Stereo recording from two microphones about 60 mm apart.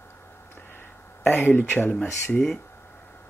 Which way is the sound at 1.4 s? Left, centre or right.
Left.